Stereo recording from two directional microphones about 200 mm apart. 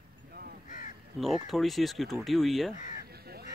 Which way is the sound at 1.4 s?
Centre (ahead or behind).